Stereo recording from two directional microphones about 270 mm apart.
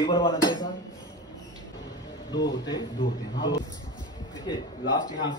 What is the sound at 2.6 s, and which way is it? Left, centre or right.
Speech, centre.